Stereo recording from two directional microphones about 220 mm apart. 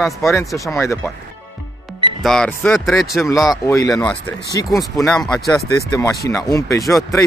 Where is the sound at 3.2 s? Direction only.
15° left (ahead or behind).